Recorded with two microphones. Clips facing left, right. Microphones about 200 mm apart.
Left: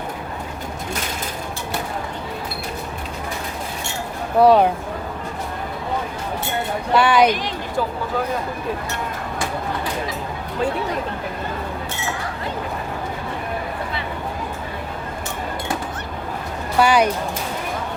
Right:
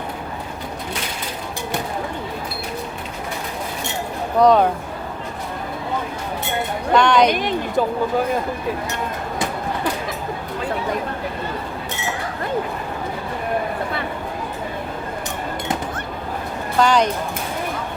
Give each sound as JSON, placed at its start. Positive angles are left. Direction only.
{"t": 4.4, "sound": "speech", "side_deg": 5}
{"t": 6.9, "sound": "speech", "side_deg": 5}
{"t": 7.3, "sound": "speech", "side_deg": -55}
{"t": 7.8, "sound": "speech", "side_deg": -20}
{"t": 16.7, "sound": "speech", "side_deg": 10}